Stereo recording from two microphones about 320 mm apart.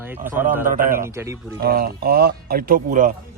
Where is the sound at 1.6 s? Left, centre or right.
Right.